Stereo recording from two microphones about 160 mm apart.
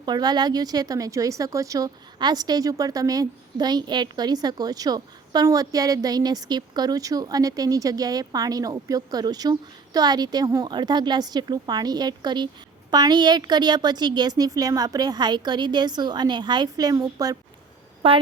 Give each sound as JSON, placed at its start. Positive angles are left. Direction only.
{"t": 0.0, "sound": "speech", "side_deg": -25}
{"t": 18.0, "sound": "a woman's voice", "side_deg": -35}